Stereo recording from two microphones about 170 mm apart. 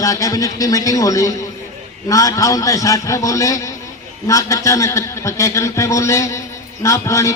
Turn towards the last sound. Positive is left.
turn(degrees=20)  # may be behind; listen again after turning